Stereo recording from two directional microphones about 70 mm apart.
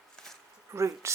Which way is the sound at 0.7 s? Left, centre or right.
Right.